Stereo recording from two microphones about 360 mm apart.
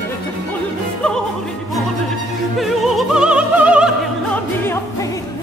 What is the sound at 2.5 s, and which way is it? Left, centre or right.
Opera, centre.